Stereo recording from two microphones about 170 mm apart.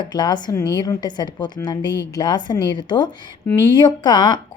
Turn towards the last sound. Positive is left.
turn(degrees=25)  # may be behind; listen again after turning